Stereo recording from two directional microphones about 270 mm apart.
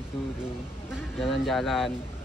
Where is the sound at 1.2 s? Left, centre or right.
Centre.